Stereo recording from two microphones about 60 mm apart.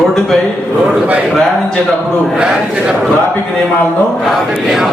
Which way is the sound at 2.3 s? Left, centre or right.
Centre.